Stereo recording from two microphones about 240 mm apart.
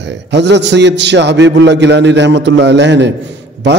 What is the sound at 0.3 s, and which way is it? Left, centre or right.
A man's voice, right.